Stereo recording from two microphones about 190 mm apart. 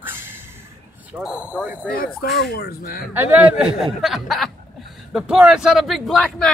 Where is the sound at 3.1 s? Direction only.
10° right (ahead or behind).